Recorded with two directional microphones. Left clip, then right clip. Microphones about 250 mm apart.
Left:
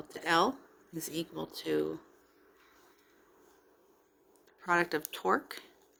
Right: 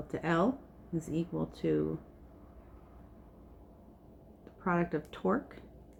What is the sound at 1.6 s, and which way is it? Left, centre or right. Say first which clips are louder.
Speech: right 1 dB; left.